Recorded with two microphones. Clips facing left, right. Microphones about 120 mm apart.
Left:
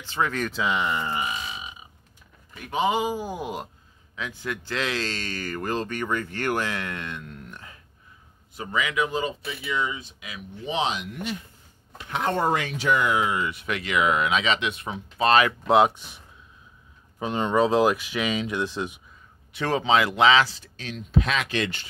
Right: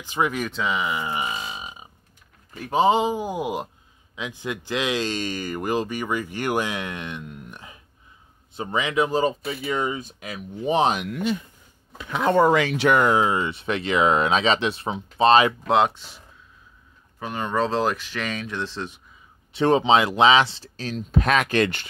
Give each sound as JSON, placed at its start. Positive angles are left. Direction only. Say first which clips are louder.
{"t": 0.0, "sound": "speech", "louder": "right 2 dB", "side_deg": -15}
{"t": 0.5, "sound": "speech", "louder": "even", "side_deg": 0}
{"t": 1.3, "sound": "burping", "louder": "right 2 dB", "side_deg": -35}
{"t": 2.6, "sound": "speech", "louder": "right 5 dB", "side_deg": -35}
{"t": 8.5, "sound": "speech", "louder": "right 3 dB", "side_deg": -30}
{"t": 12.5, "sound": "speech", "louder": "right 5 dB", "side_deg": -80}
{"t": 13.0, "sound": "speech", "louder": "right 4 dB", "side_deg": -30}
{"t": 15.6, "sound": "speech", "louder": "left 1 dB", "side_deg": 5}
{"t": 17.2, "sound": "speech", "louder": "left 3 dB", "side_deg": 20}
{"t": 19.5, "sound": "speech", "louder": "right 4 dB", "side_deg": -25}